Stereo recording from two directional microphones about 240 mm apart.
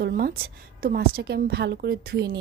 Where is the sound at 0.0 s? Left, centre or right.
Right.